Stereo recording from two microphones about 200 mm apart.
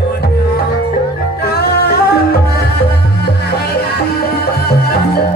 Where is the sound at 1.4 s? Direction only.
50° left (ahead or behind).